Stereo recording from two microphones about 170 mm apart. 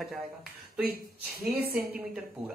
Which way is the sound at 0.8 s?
65° right (ahead or behind).